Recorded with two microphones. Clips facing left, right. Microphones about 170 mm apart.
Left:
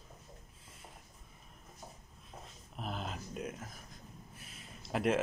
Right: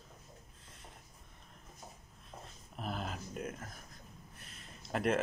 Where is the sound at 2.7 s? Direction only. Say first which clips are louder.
Right 1 dB; centre (ahead or behind).